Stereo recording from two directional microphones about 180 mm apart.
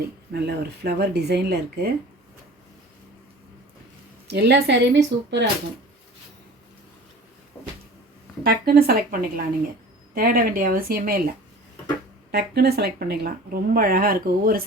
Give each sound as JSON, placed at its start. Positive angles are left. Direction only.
{"t": 0.3, "sound": "speech", "side_deg": -65}
{"t": 4.3, "sound": "speech", "side_deg": -65}
{"t": 8.4, "sound": "speech", "side_deg": -55}
{"t": 12.3, "sound": "speech", "side_deg": -60}